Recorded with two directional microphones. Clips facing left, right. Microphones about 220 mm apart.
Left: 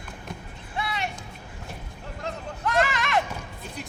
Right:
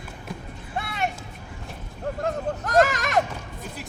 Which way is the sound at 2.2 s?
40° right (ahead or behind).